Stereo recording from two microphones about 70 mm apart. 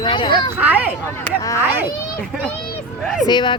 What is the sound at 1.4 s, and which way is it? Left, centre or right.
Speech, left.